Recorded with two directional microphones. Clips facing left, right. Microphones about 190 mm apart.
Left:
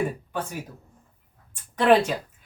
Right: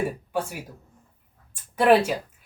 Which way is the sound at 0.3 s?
10° right (ahead or behind).